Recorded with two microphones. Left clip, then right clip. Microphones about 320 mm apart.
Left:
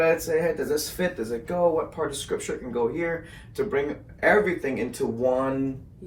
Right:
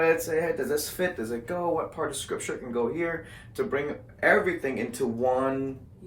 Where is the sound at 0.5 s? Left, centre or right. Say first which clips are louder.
Left 2 dB; centre.